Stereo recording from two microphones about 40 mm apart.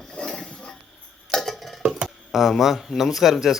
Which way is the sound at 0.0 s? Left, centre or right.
Centre.